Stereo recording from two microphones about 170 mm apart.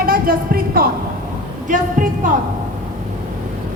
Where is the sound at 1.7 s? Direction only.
50° right (ahead or behind).